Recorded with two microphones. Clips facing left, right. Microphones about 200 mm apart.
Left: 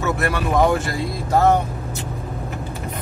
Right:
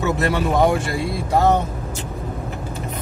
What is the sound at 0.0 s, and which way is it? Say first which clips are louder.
Speech: right 2 dB; 20° right (ahead or behind).